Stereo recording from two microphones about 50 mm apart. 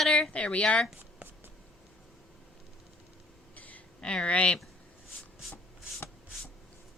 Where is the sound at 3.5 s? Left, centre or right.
Left.